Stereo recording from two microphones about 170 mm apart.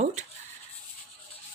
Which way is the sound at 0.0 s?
40° right (ahead or behind).